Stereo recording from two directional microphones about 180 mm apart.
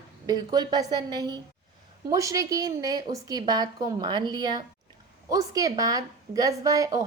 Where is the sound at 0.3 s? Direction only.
20° right (ahead or behind).